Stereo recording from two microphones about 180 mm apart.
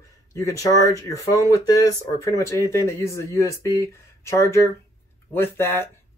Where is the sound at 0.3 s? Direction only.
20° left (ahead or behind).